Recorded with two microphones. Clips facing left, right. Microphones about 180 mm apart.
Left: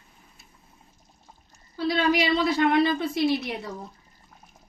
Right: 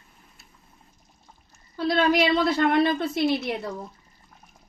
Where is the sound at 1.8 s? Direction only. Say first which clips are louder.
Right 2 dB; 55° right (ahead or behind).